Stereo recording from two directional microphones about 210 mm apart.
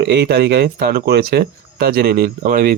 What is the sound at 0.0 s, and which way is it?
Speech, 50° right (ahead or behind).